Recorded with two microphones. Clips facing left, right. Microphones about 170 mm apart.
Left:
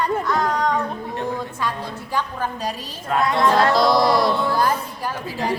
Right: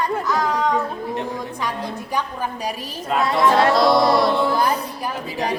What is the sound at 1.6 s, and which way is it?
A woman's voice, 15° right (ahead or behind).